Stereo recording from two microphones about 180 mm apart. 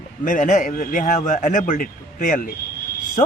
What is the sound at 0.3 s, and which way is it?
Speech, 45° left (ahead or behind).